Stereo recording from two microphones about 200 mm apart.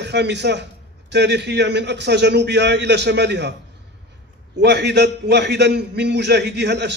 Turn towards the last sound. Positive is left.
turn(degrees=-60)  # may be behind; listen again after turning